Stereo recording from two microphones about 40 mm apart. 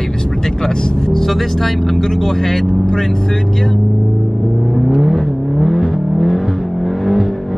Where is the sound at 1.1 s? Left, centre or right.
Centre.